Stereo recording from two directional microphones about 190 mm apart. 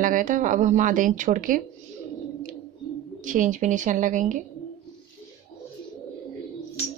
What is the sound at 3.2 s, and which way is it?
Speech, 40° right (ahead or behind).